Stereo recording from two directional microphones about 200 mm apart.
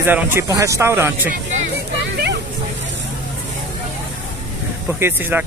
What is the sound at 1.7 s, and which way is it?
Vehicle, 55° right (ahead or behind).